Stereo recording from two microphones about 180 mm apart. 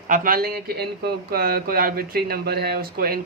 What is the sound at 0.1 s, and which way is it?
A man's voice, 50° right (ahead or behind).